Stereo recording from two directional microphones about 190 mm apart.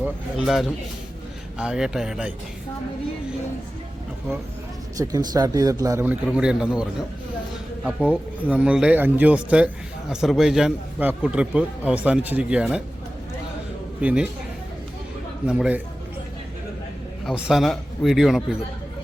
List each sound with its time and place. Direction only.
0.0 s a man's voice: 5° right (ahead or behind)
4.9 s speech: 20° right (ahead or behind)
6.2 s a man's voice: 5° right (ahead or behind)
7.9 s a man's voice: 5° right (ahead or behind)
14.0 s speech: 5° right (ahead or behind)
15.4 s a man's voice: 5° right (ahead or behind)
17.2 s a man's voice: centre (ahead or behind)